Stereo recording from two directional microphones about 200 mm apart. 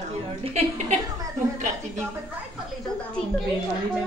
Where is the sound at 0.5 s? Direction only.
35° right (ahead or behind).